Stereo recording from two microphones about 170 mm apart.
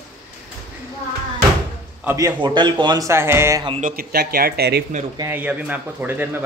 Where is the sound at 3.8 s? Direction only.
60° right (ahead or behind).